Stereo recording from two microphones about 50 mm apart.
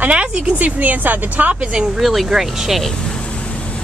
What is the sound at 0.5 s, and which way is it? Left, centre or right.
Speech, right.